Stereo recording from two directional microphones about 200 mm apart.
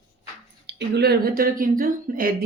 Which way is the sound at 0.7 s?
60° right (ahead or behind).